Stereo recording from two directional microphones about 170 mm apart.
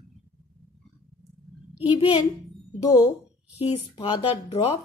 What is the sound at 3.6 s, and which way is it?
Speech, 40° left (ahead or behind).